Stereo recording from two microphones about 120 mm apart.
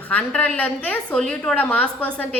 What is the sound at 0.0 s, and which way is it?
A woman's voice, 15° left (ahead or behind).